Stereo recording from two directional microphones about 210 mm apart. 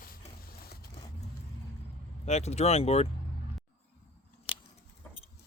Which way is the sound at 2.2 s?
30° left (ahead or behind).